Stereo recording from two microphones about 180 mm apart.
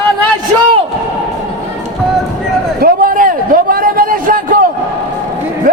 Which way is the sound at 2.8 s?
55° right (ahead or behind).